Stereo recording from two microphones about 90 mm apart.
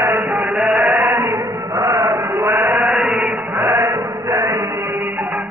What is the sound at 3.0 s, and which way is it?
Chant, centre (ahead or behind).